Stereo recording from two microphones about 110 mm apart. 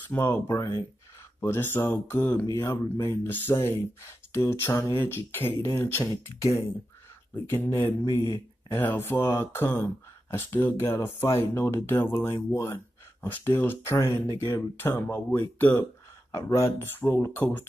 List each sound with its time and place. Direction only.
0.1 s speech: 20° left (ahead or behind)
12.5 s a sound: 25° left (ahead or behind)
13.4 s speech: 20° left (ahead or behind)
16.3 s speech: 30° left (ahead or behind)